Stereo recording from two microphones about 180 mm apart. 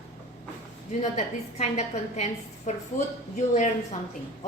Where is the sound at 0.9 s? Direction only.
40° left (ahead or behind).